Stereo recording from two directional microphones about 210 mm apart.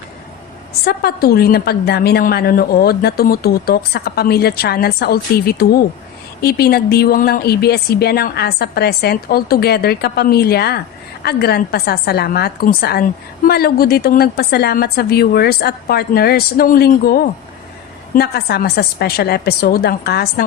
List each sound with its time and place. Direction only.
0.9 s a woman's voice: 50° left (ahead or behind)